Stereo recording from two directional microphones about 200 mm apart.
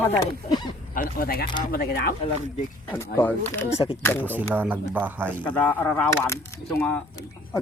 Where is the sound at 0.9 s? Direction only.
45° left (ahead or behind).